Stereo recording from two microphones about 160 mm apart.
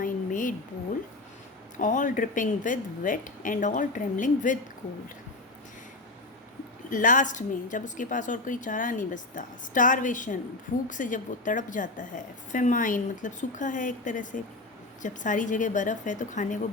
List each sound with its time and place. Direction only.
0.0 s a sound: 55° left (ahead or behind)
1.8 s speech: 55° left (ahead or behind)
6.9 s a woman's voice: 55° left (ahead or behind)